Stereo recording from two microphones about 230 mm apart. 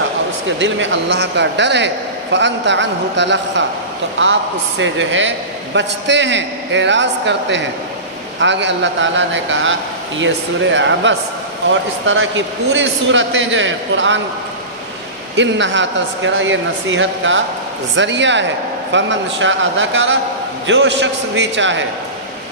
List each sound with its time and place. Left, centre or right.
0.4 s a man's voice: right
4.8 s a man's voice: right
15.4 s a man's voice: right